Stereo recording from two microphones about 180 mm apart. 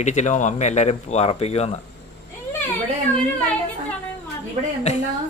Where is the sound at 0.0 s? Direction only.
40° left (ahead or behind).